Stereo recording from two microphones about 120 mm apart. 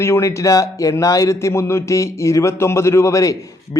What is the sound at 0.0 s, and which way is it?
A man's voice, 25° left (ahead or behind).